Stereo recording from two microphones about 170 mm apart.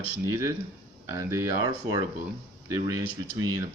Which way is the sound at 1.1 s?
15° right (ahead or behind).